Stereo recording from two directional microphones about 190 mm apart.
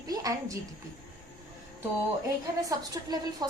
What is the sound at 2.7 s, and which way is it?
Speech, 20° right (ahead or behind).